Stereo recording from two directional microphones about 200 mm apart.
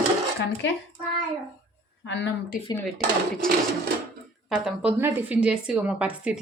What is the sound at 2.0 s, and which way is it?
Speech, 65° left (ahead or behind).